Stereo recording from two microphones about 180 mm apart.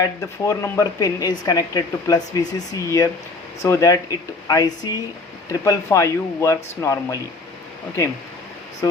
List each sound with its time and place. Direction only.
0.0 s speech: 15° left (ahead or behind)
8.8 s speech: 20° left (ahead or behind)